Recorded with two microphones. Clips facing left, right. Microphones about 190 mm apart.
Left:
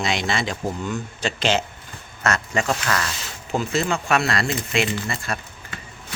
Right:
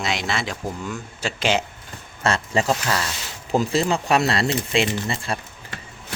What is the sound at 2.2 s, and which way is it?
Speech, 30° right (ahead or behind).